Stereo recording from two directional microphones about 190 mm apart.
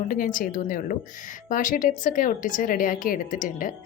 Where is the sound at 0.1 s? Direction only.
45° left (ahead or behind).